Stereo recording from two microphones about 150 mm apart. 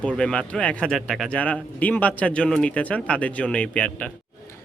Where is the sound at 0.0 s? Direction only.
5° left (ahead or behind).